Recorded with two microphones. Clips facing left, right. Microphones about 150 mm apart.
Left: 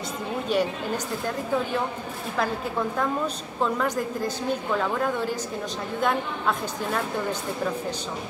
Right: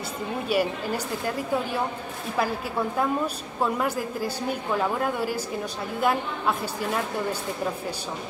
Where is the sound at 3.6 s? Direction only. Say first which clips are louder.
Left 1 dB; 10° right (ahead or behind).